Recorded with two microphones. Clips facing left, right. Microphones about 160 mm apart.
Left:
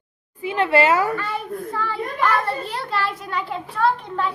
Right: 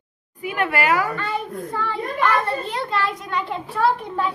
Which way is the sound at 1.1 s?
5° left (ahead or behind).